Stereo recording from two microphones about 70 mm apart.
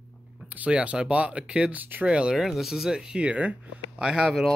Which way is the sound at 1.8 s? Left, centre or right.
Right.